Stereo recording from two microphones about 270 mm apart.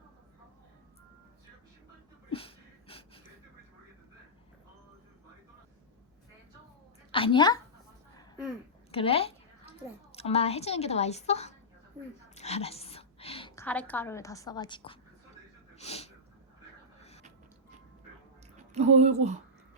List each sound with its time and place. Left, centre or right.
2.3 s a sound: centre
7.1 s a woman's voice: centre
8.9 s a woman's voice: left
12.3 s whispering: left
13.6 s a woman's voice: centre
15.7 s a sound: left
18.5 s speech: right